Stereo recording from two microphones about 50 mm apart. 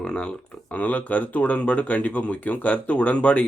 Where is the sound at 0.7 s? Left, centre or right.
Left.